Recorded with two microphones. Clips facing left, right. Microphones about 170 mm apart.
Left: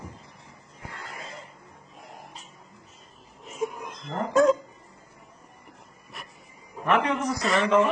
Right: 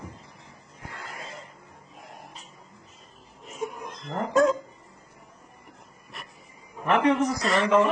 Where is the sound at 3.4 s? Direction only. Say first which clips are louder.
Left 2 dB; centre (ahead or behind).